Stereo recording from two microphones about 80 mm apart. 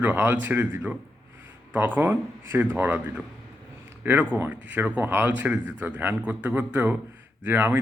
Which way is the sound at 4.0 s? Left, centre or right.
Right.